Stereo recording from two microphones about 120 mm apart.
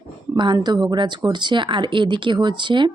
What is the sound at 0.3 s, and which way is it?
Speech, 40° right (ahead or behind).